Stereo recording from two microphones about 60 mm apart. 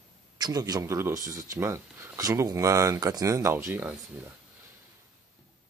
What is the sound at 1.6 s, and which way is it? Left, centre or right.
Speech, right.